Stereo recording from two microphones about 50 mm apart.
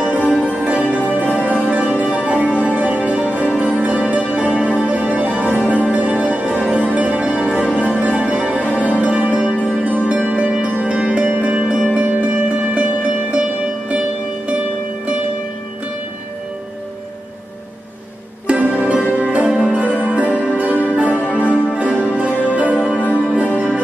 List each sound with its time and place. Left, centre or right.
0.3 s music: right
18.5 s music: right